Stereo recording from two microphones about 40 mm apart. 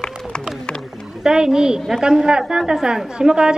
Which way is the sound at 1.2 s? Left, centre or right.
Centre.